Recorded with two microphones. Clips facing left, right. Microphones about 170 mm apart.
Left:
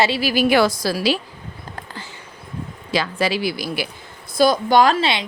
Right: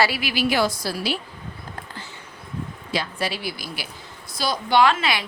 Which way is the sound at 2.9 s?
90° left.